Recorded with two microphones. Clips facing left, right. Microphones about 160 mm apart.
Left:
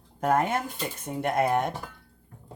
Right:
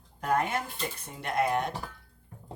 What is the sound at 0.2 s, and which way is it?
Speech, 50° left (ahead or behind).